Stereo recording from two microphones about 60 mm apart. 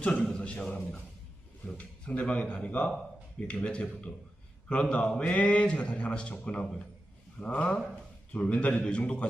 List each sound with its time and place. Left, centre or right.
0.2 s a man's voice: centre